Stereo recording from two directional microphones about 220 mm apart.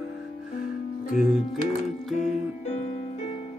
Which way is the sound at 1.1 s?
Centre (ahead or behind).